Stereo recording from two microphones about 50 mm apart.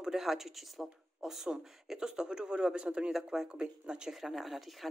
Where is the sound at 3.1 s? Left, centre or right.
Centre.